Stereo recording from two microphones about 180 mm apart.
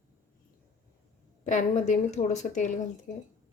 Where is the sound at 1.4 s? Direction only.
45° left (ahead or behind).